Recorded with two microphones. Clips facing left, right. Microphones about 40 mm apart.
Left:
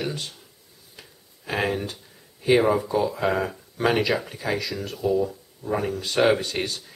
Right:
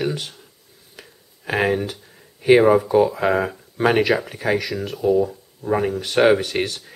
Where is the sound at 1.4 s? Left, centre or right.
Right.